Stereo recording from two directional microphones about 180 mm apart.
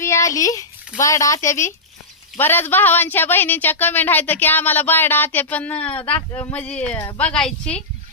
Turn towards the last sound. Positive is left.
turn(degrees=5)  # may be behind; listen again after turning